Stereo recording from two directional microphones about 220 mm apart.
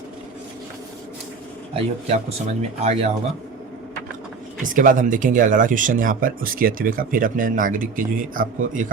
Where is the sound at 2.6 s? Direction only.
25° right (ahead or behind).